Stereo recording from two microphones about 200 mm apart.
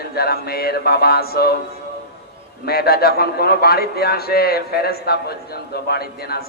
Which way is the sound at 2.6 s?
50° left (ahead or behind).